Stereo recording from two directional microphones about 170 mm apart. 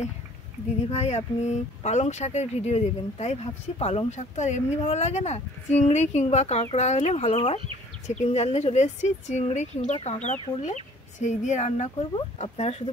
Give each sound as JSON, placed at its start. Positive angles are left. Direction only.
{"t": 0.8, "sound": "speech", "side_deg": 40}